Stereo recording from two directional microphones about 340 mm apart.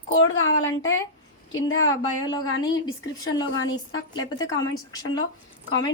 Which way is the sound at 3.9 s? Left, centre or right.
Centre.